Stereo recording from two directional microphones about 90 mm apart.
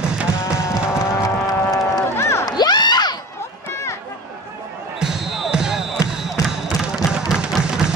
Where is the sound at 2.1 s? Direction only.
30° left (ahead or behind).